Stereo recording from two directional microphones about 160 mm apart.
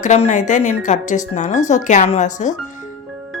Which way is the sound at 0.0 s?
50° left (ahead or behind).